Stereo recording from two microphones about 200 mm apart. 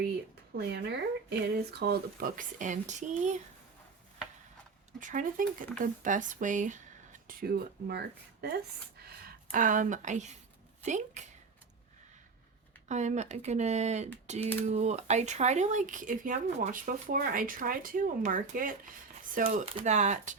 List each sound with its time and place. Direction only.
0.5 s speech: 55° right (ahead or behind); by 3.3 s 35° right (ahead or behind)
4.9 s speech: 40° right (ahead or behind)
12.9 s speech: 35° right (ahead or behind)
19.5 s speech: 30° right (ahead or behind)